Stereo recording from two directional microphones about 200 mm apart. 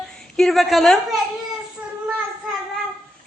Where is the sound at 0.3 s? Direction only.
Centre (ahead or behind).